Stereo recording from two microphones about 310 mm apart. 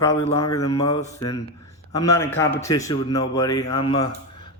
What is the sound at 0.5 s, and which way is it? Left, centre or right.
Speech, centre.